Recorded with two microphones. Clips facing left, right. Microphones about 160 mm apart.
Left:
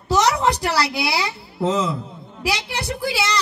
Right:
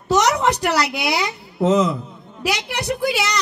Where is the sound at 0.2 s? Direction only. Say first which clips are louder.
Right 1 dB; 30° left (ahead or behind).